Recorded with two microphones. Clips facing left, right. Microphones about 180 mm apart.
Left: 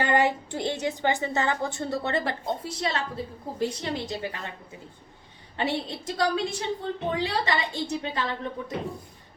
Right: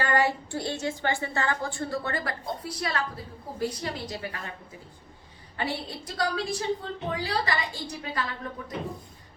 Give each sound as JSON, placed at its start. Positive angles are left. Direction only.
{"t": 0.0, "sound": "a woman's voice", "side_deg": 20}
{"t": 5.5, "sound": "a woman's voice", "side_deg": 25}